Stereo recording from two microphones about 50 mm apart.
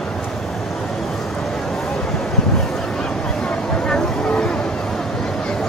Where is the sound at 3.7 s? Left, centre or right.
Centre.